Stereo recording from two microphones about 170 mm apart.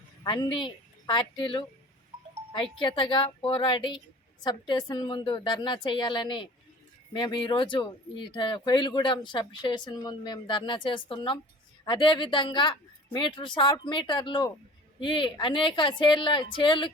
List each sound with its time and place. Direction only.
0.3 s speech: 30° left (ahead or behind)